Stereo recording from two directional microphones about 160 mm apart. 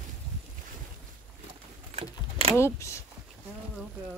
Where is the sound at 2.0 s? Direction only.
40° right (ahead or behind).